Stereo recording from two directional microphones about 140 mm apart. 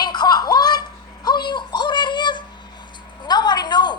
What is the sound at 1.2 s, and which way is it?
Music, 30° left (ahead or behind).